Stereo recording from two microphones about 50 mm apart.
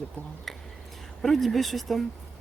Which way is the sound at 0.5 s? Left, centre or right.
Centre.